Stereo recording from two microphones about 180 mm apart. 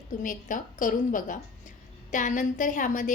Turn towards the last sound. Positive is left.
turn(degrees=45)  # may be behind; listen again after turning